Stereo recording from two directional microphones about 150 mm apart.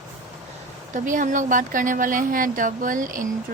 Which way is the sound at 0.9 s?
60° right (ahead or behind).